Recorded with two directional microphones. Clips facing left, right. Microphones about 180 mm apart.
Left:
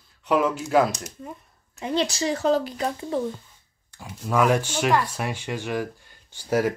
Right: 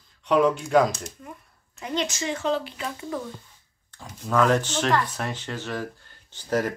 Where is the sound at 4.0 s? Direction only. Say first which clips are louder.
Even; 10° left (ahead or behind).